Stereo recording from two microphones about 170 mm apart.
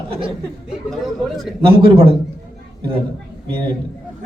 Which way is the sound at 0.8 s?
Centre (ahead or behind).